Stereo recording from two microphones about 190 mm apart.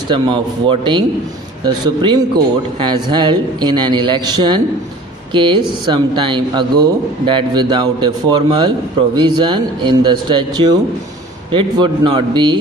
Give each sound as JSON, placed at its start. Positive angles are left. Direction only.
{"t": 0.1, "sound": "a man's voice", "side_deg": -25}